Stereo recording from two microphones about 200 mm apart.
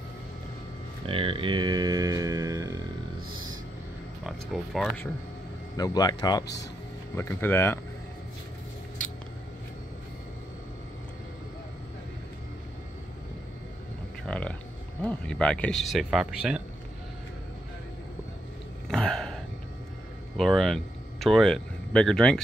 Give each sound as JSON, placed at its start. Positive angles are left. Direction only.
{"t": 1.0, "sound": "mantra", "side_deg": -30}
{"t": 4.3, "sound": "speech", "side_deg": 0}
{"t": 5.8, "sound": "speech", "side_deg": 20}
{"t": 6.4, "sound": "speech", "side_deg": 60}
{"t": 7.2, "sound": "speech", "side_deg": 10}
{"t": 14.2, "sound": "a sound", "side_deg": 5}
{"t": 15.0, "sound": "speech", "side_deg": 5}
{"t": 18.9, "sound": "a sound", "side_deg": 5}
{"t": 20.3, "sound": "speech", "side_deg": 0}